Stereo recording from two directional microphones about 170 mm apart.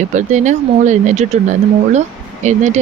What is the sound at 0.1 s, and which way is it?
Speech, 45° right (ahead or behind).